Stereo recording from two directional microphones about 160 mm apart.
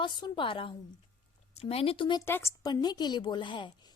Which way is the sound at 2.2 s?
15° left (ahead or behind).